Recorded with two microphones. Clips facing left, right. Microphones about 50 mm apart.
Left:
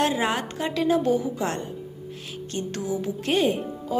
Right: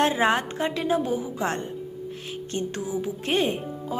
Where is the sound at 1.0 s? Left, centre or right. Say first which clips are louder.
Left 4 dB; centre.